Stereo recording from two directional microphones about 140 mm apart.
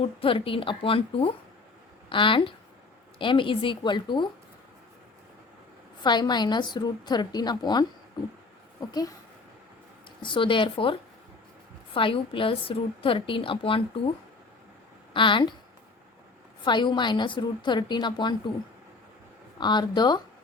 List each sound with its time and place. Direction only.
0.0 s a woman's voice: 40° left (ahead or behind)
6.0 s a woman's voice: 30° left (ahead or behind)
8.9 s a woman's voice: 30° left (ahead or behind)
10.2 s a woman's voice: 35° left (ahead or behind)
11.9 s a woman's voice: 40° left (ahead or behind)
15.1 s a woman's voice: 35° left (ahead or behind)
16.6 s a woman's voice: 35° left (ahead or behind)
19.5 s a woman's voice: 30° left (ahead or behind)